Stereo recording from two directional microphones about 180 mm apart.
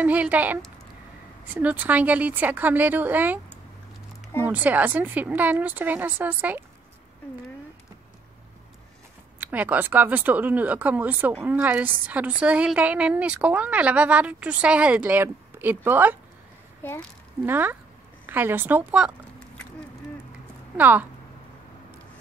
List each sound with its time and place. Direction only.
0.0 s a woman's voice: 10° right (ahead or behind)
4.5 s a woman's voice: 10° right (ahead or behind)
9.4 s a woman's voice: 10° right (ahead or behind)
16.8 s a child's voice: 10° left (ahead or behind)
17.5 s a woman's voice: 10° right (ahead or behind)
20.7 s a woman's voice: 10° right (ahead or behind)